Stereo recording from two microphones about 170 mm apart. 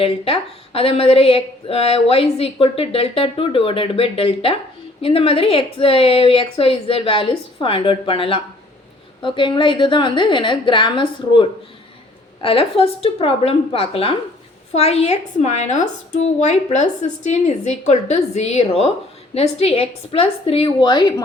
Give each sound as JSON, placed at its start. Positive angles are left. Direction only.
{"t": 0.0, "sound": "a woman's voice", "side_deg": 35}